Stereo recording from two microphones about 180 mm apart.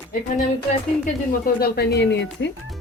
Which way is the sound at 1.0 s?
55° left (ahead or behind).